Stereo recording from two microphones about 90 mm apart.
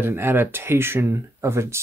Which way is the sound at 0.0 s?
25° right (ahead or behind).